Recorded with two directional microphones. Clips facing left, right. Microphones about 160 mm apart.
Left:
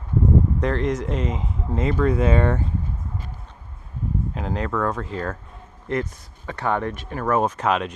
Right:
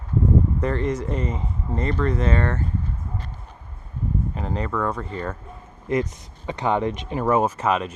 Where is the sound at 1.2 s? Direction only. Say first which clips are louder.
Left 1 dB; 90° left.